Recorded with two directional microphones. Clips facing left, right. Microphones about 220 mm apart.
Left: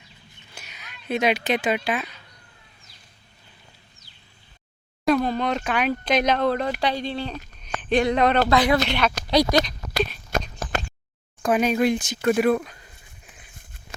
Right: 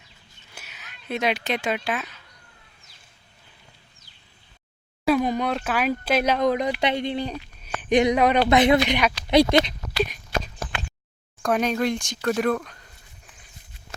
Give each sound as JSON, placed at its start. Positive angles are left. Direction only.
{"t": 0.5, "sound": "speech", "side_deg": -5}
{"t": 5.0, "sound": "speech", "side_deg": -10}
{"t": 8.4, "sound": "speech", "side_deg": -20}
{"t": 9.3, "sound": "speech", "side_deg": -25}
{"t": 10.3, "sound": "a sound", "side_deg": 45}
{"t": 11.4, "sound": "speech", "side_deg": 5}